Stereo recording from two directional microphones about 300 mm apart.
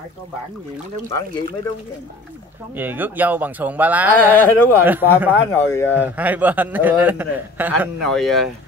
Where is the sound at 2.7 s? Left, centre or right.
Centre.